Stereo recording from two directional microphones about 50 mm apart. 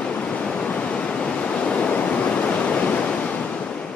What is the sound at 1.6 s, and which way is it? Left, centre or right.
Waves, left.